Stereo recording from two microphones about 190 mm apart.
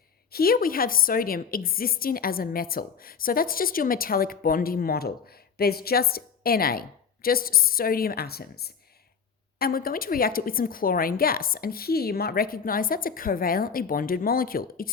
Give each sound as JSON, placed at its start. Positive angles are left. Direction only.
{"t": 0.3, "sound": "a woman's voice", "side_deg": 50}